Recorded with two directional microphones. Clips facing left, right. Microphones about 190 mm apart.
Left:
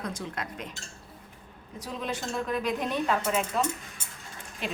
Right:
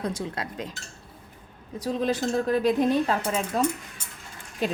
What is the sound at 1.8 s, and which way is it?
A woman's voice, 35° right (ahead or behind).